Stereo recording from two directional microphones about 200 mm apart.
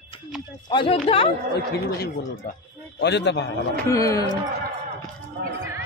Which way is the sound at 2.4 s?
45° left (ahead or behind).